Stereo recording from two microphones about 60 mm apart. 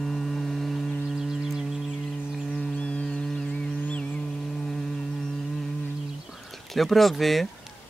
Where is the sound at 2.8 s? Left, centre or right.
Left.